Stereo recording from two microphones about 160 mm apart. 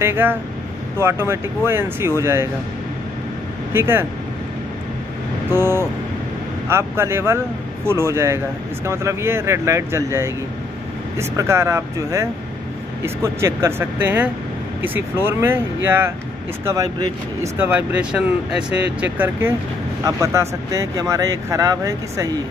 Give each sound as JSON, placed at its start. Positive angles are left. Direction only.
{"t": 0.0, "sound": "speech", "side_deg": -15}
{"t": 3.7, "sound": "speech", "side_deg": -15}
{"t": 5.5, "sound": "speech", "side_deg": -15}